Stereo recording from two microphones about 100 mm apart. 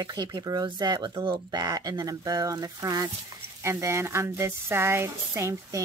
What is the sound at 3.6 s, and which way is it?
Speech, 25° right (ahead or behind).